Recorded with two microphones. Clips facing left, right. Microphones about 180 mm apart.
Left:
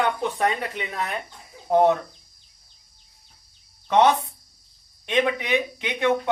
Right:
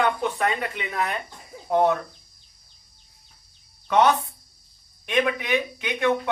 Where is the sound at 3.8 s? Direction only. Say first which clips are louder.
Left 1 dB; 20° left (ahead or behind).